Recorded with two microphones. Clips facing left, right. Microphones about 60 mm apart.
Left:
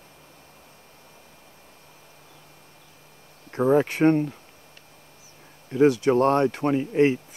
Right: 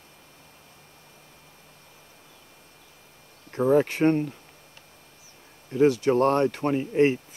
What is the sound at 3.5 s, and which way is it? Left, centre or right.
Speech, left.